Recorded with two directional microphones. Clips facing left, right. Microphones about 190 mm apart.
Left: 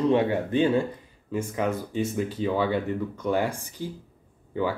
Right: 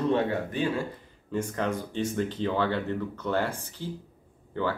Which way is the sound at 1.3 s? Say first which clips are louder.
Left 2 dB; 10° left (ahead or behind).